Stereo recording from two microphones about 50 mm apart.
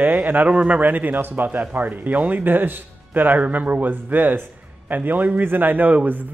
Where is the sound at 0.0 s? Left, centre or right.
Right.